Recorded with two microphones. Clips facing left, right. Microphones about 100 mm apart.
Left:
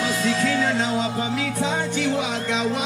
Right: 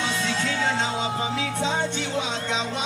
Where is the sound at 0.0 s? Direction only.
30° right (ahead or behind).